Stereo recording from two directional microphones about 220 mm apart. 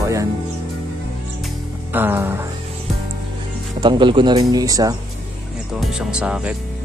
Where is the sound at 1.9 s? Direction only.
10° right (ahead or behind).